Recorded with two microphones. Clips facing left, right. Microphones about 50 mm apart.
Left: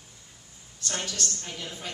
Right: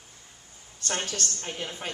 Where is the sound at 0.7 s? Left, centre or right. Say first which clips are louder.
Right 2 dB; right.